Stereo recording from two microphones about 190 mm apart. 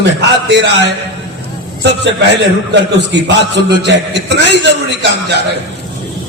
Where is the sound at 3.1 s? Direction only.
65° right (ahead or behind).